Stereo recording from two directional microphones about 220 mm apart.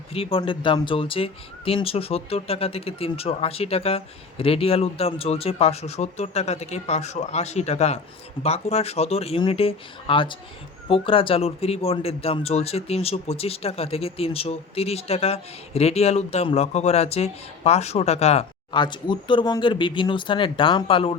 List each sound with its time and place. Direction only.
0.1 s speech: 25° left (ahead or behind)